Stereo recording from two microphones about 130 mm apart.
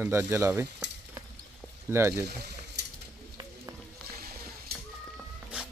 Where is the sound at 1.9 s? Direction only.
20° right (ahead or behind).